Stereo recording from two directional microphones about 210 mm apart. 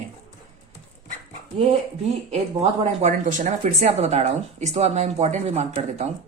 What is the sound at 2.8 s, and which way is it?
Speech, 35° right (ahead or behind).